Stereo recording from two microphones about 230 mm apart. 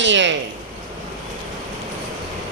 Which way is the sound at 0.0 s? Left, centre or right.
Right.